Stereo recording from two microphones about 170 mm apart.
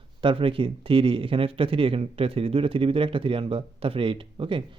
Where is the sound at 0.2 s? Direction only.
30° right (ahead or behind).